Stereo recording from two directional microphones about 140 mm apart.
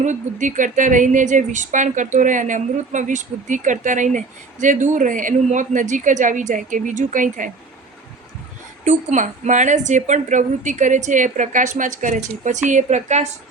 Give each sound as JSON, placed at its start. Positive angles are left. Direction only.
{"t": 0.0, "sound": "a woman's voice", "side_deg": -60}
{"t": 8.8, "sound": "a woman's voice", "side_deg": -65}